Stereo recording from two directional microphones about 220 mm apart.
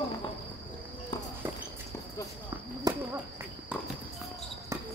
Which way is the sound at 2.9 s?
15° right (ahead or behind).